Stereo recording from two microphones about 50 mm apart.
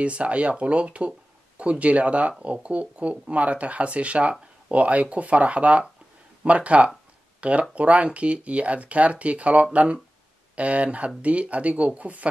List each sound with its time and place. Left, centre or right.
0.0 s speech: right